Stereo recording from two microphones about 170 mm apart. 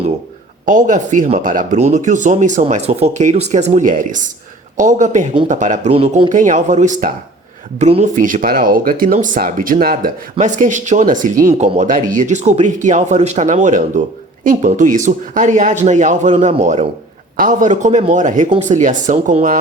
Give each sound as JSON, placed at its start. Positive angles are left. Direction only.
{"t": 0.6, "sound": "speech", "side_deg": -50}
{"t": 5.9, "sound": "a man's voice", "side_deg": -35}
{"t": 6.3, "sound": "speech", "side_deg": -45}
{"t": 10.3, "sound": "a man's voice", "side_deg": -45}